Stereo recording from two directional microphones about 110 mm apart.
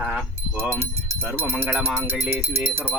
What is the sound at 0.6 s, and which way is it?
Speech, 20° right (ahead or behind).